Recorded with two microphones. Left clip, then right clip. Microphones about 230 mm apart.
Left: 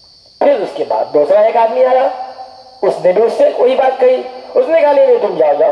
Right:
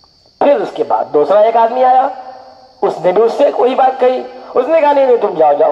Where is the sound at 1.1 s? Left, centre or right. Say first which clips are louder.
Even; right.